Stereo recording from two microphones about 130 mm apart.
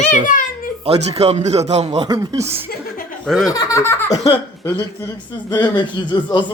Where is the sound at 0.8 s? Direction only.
50° right (ahead or behind).